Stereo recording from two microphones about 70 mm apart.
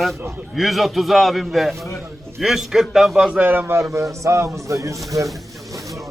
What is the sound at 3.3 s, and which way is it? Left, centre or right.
A man's voice, right.